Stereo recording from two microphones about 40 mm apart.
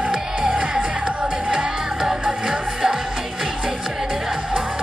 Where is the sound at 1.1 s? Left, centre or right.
Centre.